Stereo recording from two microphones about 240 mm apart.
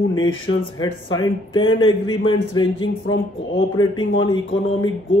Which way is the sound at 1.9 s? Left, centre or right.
Centre.